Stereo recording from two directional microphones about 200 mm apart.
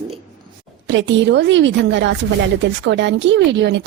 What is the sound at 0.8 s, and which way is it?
A woman's voice, 65° right (ahead or behind).